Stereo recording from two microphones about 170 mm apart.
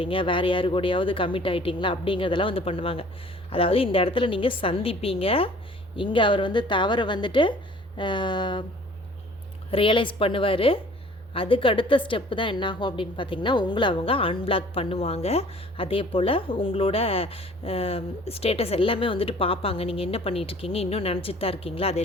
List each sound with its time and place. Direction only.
0.0 s a woman's voice: 30° left (ahead or behind)
9.7 s a woman's voice: 30° left (ahead or behind)